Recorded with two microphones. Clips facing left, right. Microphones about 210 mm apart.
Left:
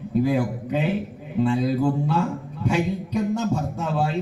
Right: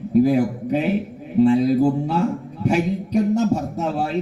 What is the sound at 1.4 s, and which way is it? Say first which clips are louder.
Speech: right 6 dB; 40° right (ahead or behind).